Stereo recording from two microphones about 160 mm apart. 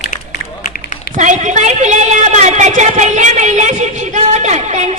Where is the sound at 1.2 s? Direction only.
50° right (ahead or behind).